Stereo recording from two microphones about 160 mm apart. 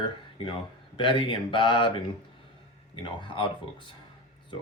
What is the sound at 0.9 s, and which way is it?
Speech, 30° left (ahead or behind).